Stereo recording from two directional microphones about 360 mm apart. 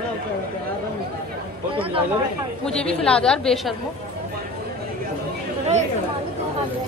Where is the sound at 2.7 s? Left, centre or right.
Centre.